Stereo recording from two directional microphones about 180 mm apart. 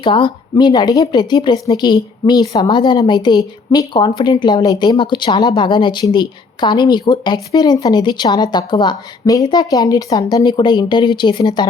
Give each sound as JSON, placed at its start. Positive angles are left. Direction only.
{"t": 0.0, "sound": "speech", "side_deg": 25}